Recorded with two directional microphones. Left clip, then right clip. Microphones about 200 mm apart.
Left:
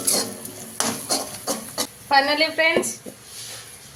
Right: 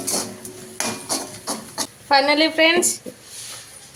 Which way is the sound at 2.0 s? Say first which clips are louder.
Right 2 dB; 30° right (ahead or behind).